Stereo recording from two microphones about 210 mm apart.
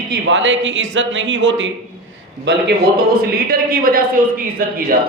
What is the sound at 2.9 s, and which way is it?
A man's voice, 45° right (ahead or behind).